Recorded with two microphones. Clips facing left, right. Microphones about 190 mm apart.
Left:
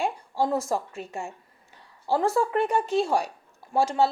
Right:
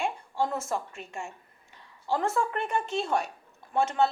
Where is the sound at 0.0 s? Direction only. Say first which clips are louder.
Left 3 dB; 35° left (ahead or behind).